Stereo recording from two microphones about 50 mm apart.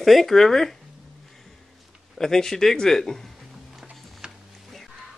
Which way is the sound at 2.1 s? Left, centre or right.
Centre.